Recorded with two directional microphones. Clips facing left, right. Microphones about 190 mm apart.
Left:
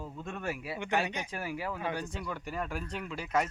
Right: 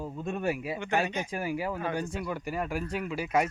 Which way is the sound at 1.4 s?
10° right (ahead or behind).